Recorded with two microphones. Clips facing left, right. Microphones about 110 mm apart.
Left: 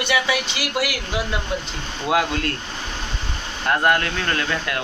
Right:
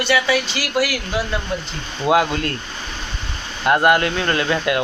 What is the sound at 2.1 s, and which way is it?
Speech, 5° right (ahead or behind).